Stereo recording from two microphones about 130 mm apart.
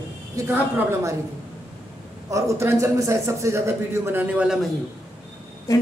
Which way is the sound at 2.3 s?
20° right (ahead or behind).